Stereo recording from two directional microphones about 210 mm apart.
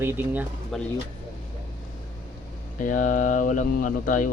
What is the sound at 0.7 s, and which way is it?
Speech, centre (ahead or behind).